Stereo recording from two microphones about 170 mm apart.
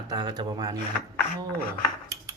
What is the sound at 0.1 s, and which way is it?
Speech, 25° right (ahead or behind).